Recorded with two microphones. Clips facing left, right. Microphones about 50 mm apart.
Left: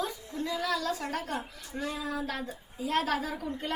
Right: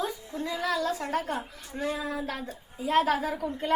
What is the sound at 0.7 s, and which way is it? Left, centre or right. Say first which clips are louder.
A woman's voice: right 3 dB; centre.